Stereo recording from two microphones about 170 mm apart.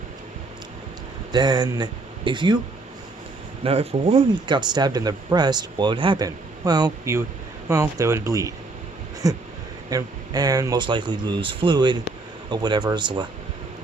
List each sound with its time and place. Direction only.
1.3 s speech: 25° right (ahead or behind)
3.6 s speech: 35° right (ahead or behind)